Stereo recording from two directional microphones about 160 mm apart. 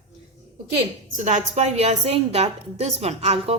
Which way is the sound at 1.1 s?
45° right (ahead or behind).